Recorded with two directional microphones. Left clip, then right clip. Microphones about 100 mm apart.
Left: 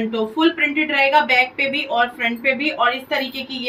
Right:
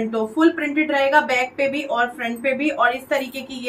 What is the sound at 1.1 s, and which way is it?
A woman's voice, 15° right (ahead or behind).